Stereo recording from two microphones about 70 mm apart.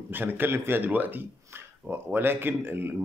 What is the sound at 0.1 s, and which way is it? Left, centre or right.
Speech, right.